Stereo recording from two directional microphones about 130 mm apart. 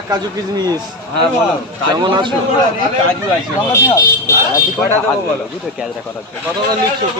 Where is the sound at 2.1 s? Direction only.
35° right (ahead or behind).